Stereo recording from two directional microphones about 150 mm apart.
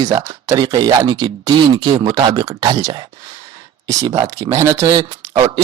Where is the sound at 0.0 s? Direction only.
25° right (ahead or behind).